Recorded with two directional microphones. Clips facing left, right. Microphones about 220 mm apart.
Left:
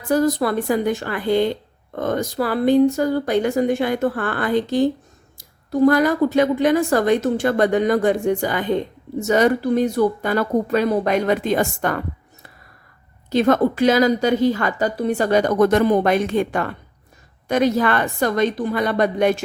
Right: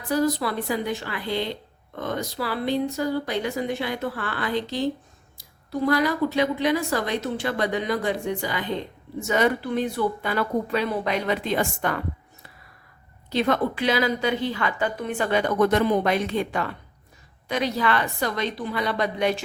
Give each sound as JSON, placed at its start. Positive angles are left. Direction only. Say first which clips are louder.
{"t": 0.1, "sound": "a woman's voice", "louder": "left 5 dB", "side_deg": 50}
{"t": 9.2, "sound": "a woman's voice", "louder": "left 6 dB", "side_deg": 40}
{"t": 13.3, "sound": "a woman's voice", "louder": "left 7 dB", "side_deg": 45}